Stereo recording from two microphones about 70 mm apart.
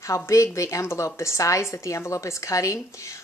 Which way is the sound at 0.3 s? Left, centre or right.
Left.